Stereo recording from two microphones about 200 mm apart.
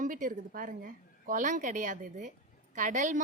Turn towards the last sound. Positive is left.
turn(degrees=-40)  # may be behind; listen again after turning